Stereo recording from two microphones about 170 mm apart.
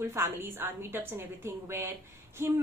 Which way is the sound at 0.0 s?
15° right (ahead or behind).